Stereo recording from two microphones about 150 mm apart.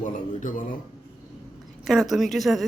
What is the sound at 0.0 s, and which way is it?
Speech, 60° left (ahead or behind).